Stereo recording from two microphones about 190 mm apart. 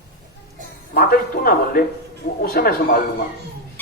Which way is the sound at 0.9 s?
50° left (ahead or behind).